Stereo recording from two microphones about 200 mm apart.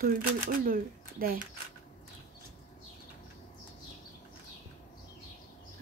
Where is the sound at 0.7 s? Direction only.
45° right (ahead or behind).